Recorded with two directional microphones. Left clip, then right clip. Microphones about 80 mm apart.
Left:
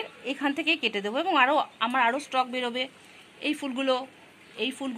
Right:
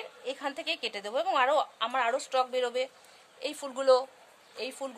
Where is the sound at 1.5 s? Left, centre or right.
Right.